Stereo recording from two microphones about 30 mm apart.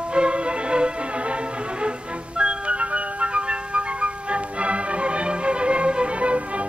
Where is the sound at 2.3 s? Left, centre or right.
Right.